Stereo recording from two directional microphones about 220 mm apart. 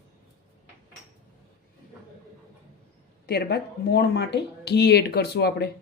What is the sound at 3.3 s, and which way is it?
Speech, 45° left (ahead or behind).